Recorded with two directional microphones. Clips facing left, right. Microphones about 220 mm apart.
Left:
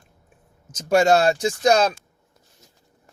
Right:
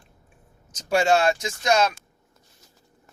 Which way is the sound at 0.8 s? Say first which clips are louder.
Left 4 dB; 45° left (ahead or behind).